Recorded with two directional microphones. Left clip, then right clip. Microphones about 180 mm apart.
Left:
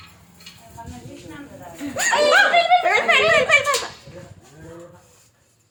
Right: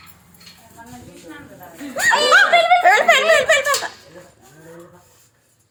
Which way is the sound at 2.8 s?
65° right (ahead or behind).